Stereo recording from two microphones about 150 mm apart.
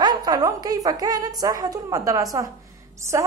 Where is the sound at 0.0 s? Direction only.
25° right (ahead or behind).